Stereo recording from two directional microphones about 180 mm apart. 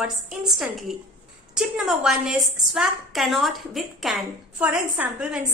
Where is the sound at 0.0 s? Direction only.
5° right (ahead or behind).